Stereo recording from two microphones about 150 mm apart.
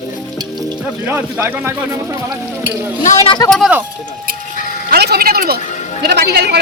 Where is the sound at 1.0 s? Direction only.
15° right (ahead or behind).